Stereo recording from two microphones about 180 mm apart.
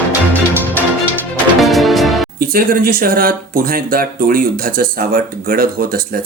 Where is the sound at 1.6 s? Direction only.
Centre (ahead or behind).